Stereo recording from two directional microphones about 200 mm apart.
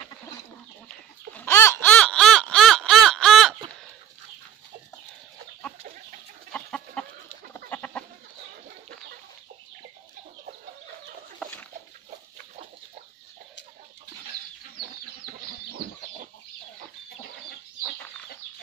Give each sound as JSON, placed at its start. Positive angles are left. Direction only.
{"t": 0.8, "sound": "laughter", "side_deg": 10}
{"t": 6.5, "sound": "chicken", "side_deg": 5}
{"t": 7.7, "sound": "goat", "side_deg": 5}
{"t": 15.8, "sound": "chicken", "side_deg": -50}